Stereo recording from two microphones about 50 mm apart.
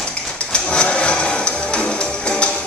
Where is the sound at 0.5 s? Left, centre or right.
Left.